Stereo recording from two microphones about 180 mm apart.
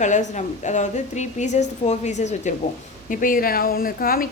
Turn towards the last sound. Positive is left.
turn(degrees=55)  # may be behind; listen again after turning